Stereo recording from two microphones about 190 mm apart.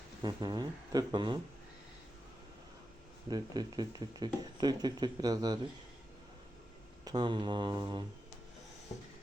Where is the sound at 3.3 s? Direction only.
20° right (ahead or behind).